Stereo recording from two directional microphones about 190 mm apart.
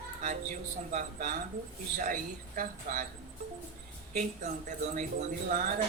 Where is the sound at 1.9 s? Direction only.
45° right (ahead or behind).